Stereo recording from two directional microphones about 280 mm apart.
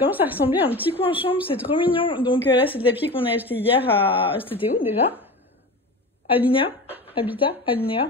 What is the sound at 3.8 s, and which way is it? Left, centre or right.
Speech, centre.